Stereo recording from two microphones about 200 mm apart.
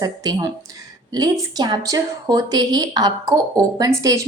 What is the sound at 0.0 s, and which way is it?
A woman's voice, 20° right (ahead or behind).